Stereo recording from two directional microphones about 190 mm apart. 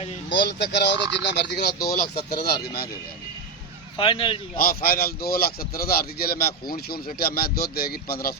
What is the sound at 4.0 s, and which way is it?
Speech, 25° left (ahead or behind).